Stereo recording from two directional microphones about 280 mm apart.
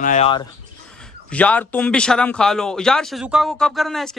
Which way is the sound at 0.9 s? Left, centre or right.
Centre.